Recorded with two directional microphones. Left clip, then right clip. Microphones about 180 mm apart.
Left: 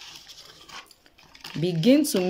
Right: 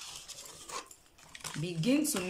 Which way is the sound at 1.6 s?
40° left (ahead or behind).